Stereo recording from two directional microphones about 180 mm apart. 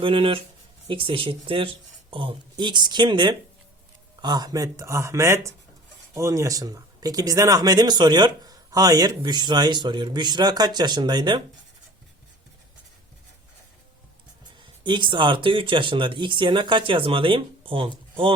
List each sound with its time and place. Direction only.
0.0 s speech: 30° right (ahead or behind)
14.8 s speech: 25° right (ahead or behind)